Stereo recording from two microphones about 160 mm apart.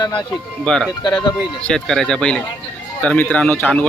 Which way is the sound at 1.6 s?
5° left (ahead or behind).